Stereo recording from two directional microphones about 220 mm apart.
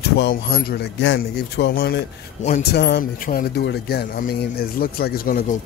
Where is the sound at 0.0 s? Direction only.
45° left (ahead or behind).